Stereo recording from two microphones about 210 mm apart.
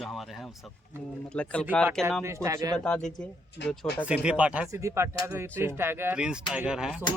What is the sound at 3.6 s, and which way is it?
Speech, 55° left (ahead or behind).